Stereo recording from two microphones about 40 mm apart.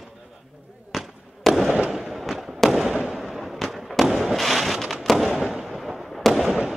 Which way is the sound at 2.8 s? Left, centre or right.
Right.